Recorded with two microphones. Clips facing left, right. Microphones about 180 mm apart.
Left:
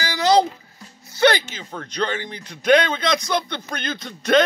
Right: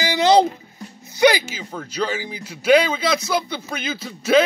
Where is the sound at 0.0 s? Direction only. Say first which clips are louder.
Right 2 dB; 20° right (ahead or behind).